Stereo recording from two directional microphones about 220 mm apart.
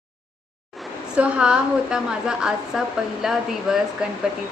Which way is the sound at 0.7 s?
Centre (ahead or behind).